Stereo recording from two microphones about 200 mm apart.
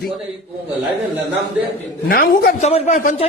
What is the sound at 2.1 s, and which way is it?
Speech, 50° left (ahead or behind).